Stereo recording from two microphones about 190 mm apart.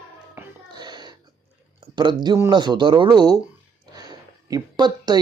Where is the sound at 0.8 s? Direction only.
20° right (ahead or behind).